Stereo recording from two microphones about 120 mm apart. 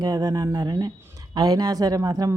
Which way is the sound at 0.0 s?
30° right (ahead or behind).